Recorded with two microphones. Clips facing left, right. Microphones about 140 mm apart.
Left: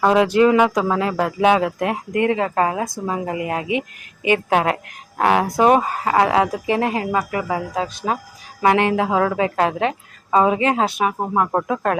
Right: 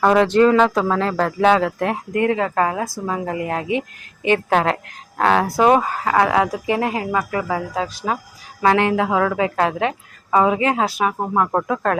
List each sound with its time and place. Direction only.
0.0 s a woman's voice: 15° left (ahead or behind)